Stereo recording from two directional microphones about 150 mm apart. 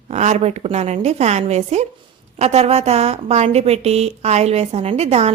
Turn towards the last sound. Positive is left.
turn(degrees=-45)  # may be behind; listen again after turning